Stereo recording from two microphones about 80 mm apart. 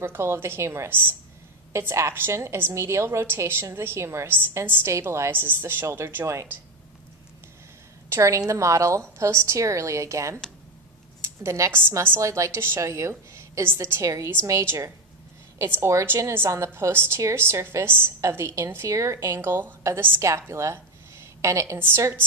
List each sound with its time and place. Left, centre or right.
0.0 s a woman's voice: right
8.1 s a woman's voice: right